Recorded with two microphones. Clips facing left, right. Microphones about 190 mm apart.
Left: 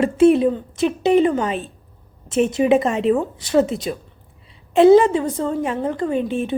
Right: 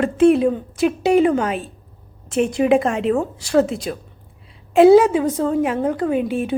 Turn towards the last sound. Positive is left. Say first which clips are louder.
# right 1 dB
turn(degrees=-5)  # may be behind; listen again after turning